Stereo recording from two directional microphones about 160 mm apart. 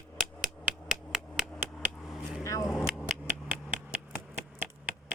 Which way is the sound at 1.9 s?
Centre (ahead or behind).